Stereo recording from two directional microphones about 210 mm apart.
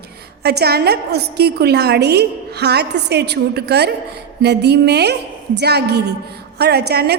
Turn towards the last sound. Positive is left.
turn(degrees=-50)  # may be behind; listen again after turning